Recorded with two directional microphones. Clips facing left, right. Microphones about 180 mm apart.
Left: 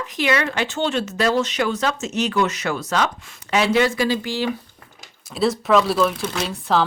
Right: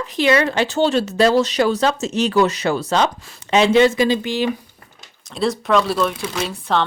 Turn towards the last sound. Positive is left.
turn(degrees=0)  # may be behind; listen again after turning